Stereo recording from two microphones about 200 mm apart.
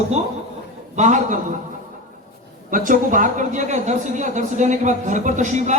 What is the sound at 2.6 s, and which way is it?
A woman's voice, 45° right (ahead or behind).